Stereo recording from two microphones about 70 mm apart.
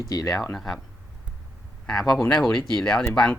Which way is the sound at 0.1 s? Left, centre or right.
Left.